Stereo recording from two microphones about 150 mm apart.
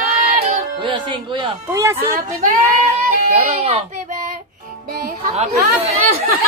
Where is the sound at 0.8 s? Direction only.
35° right (ahead or behind).